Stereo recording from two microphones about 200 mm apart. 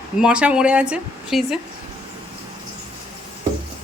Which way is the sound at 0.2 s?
5° right (ahead or behind).